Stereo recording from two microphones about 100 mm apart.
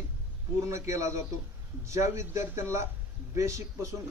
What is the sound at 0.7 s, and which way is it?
A man's voice, 30° right (ahead or behind).